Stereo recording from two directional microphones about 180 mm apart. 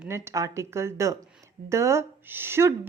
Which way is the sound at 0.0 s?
15° right (ahead or behind).